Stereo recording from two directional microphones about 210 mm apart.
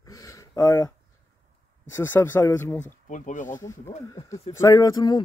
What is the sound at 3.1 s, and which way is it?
Speech, 35° left (ahead or behind).